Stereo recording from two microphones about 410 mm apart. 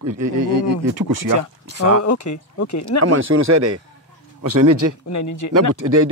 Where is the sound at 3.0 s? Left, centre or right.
Right.